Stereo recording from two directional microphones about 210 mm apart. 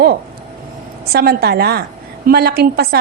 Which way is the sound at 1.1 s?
50° right (ahead or behind).